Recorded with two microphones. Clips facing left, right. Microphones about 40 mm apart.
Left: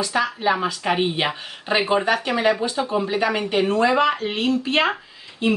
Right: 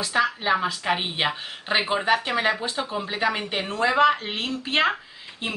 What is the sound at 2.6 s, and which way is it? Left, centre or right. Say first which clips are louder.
Speech: left 5 dB; right.